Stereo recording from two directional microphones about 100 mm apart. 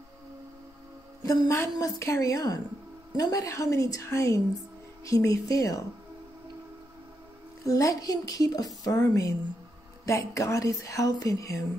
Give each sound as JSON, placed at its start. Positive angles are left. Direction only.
{"t": 1.2, "sound": "a woman's voice", "side_deg": 35}
{"t": 7.6, "sound": "a woman's voice", "side_deg": 35}